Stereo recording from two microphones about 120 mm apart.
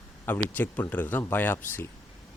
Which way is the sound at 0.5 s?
15° left (ahead or behind).